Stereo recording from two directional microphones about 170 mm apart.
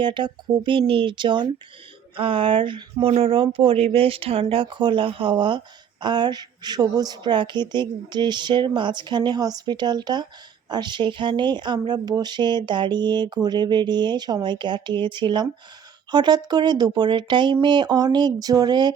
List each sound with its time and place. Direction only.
0.0 s speech: 30° right (ahead or behind)